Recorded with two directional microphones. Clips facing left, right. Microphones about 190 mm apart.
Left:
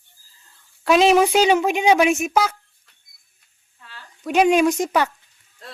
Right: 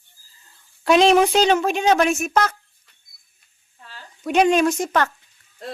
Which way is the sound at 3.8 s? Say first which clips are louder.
Right 1 dB; 40° right (ahead or behind).